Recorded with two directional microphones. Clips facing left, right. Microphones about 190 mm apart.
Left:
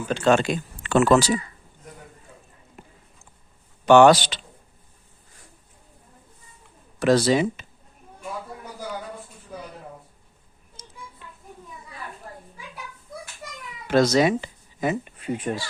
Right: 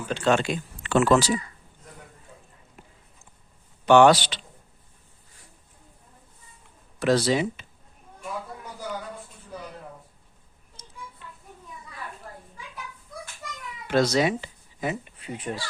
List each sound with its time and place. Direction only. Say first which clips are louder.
0.1 s speech: left 3 dB; 45° left (ahead or behind)
3.8 s speech: left 2 dB; 45° left (ahead or behind)
7.0 s speech: left 3 dB; 45° left (ahead or behind)
13.9 s speech: left 3 dB; 45° left (ahead or behind)